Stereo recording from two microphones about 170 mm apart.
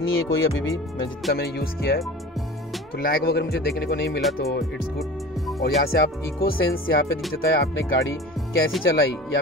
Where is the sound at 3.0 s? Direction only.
65° left (ahead or behind).